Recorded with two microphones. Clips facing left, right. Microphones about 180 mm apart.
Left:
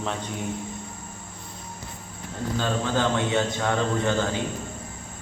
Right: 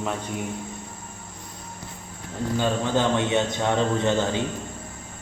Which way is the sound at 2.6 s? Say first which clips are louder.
Right 2 dB; 20° right (ahead or behind).